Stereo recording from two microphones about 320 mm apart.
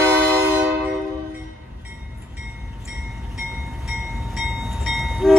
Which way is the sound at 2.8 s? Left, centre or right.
Centre.